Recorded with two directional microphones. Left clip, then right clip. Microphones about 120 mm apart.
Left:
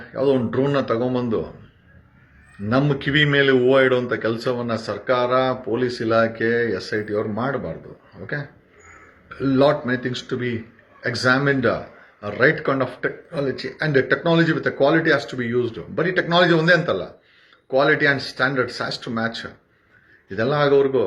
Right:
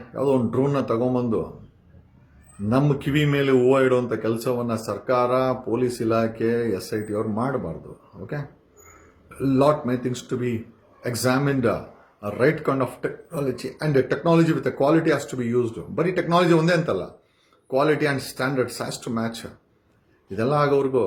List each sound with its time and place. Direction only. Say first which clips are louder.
0.1 s speech: left 2 dB; 35° right (ahead or behind)
2.6 s speech: left 2 dB; 35° right (ahead or behind)
9.4 s speech: left 2 dB; 35° right (ahead or behind)